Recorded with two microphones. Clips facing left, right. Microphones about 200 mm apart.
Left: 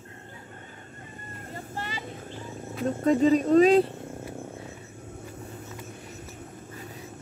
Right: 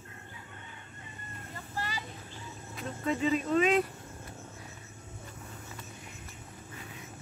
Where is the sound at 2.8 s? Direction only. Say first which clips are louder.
Left 9 dB; 40° left (ahead or behind).